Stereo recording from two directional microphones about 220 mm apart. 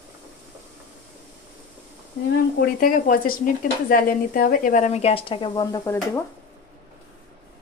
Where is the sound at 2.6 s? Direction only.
40° left (ahead or behind); by 5.9 s 20° left (ahead or behind).